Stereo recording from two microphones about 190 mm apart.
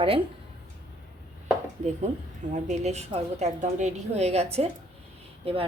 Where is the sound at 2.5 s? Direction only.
35° right (ahead or behind).